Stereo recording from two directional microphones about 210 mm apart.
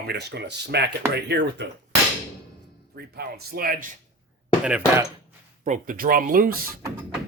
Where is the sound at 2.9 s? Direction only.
50° right (ahead or behind).